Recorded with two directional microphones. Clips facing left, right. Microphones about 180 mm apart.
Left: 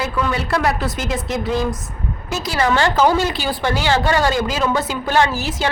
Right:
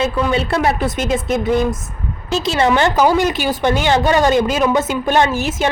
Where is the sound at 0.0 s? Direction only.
25° right (ahead or behind).